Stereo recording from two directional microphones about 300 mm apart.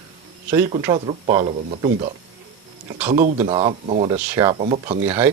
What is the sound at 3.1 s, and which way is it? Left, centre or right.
Speech, right.